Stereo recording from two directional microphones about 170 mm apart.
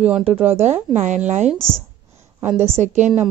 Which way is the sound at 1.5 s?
5° left (ahead or behind).